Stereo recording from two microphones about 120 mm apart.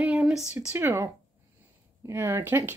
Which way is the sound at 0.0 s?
5° right (ahead or behind).